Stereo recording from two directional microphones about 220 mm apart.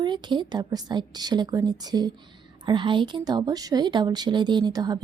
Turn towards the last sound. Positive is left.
turn(degrees=-20)  # may be behind; listen again after turning